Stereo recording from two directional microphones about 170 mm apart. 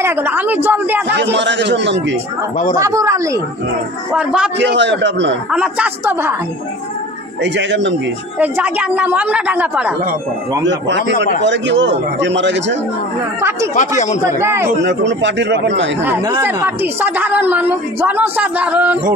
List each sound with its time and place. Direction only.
0.0 s a woman's voice: 10° right (ahead or behind)
1.1 s a man's voice: 90° right
2.8 s speech: 20° right (ahead or behind)
4.1 s a man's voice: 5° right (ahead or behind)
4.6 s a man's voice: 90° right
5.5 s a woman's voice: 5° right (ahead or behind)
7.4 s a man's voice: 90° right
8.4 s a woman's voice: 10° right (ahead or behind)
10.9 s a man's voice: 90° right
13.4 s a woman's voice: 15° right (ahead or behind)
13.7 s speech: 45° left (ahead or behind)
14.2 s a woman's voice: 15° right (ahead or behind)
14.8 s a man's voice: 90° right
16.0 s a woman's voice: 15° right (ahead or behind)